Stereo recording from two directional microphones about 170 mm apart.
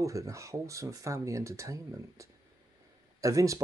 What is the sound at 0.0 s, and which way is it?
Speech, 20° right (ahead or behind).